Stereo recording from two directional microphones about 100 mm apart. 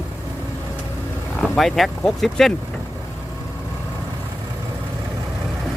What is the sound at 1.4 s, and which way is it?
Speech, centre (ahead or behind).